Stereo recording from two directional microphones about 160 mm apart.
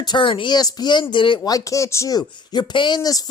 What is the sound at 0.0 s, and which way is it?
Speech, 30° left (ahead or behind).